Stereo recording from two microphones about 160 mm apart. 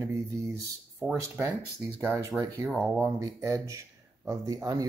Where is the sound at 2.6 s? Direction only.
Centre (ahead or behind).